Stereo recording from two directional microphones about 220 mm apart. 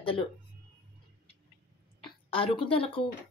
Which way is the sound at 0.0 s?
25° left (ahead or behind).